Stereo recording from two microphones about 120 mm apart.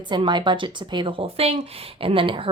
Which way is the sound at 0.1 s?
40° right (ahead or behind).